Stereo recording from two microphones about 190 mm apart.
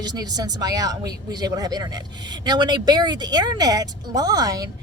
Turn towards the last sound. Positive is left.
turn(degrees=-20)  # may be behind; listen again after turning